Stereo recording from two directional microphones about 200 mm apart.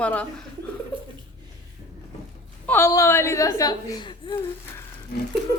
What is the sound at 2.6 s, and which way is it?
A woman's voice, 10° left (ahead or behind).